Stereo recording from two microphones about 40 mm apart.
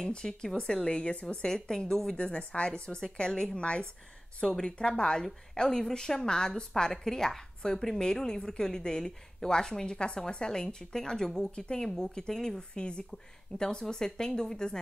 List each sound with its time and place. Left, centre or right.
0.0 s a woman's voice: centre
1.5 s a woman's voice: centre
5.6 s a woman's voice: centre
11.5 s a woman's voice: left